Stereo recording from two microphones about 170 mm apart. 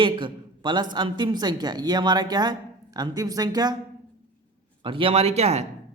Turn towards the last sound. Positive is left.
turn(degrees=-40)  # may be behind; listen again after turning